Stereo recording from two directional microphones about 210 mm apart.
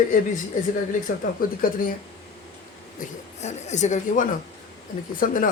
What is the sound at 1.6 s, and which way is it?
Speech, 45° left (ahead or behind).